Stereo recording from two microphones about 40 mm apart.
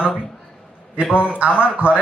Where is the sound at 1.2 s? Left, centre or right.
Right.